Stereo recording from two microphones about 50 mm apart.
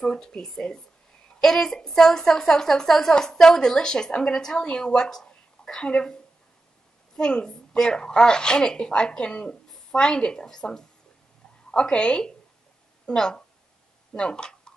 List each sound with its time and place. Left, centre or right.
0.0 s a woman's voice: centre
7.2 s a woman's voice: centre